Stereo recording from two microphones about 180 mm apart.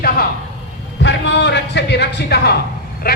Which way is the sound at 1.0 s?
75° left (ahead or behind).